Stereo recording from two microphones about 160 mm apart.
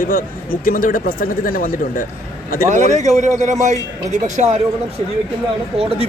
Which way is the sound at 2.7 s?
45° right (ahead or behind).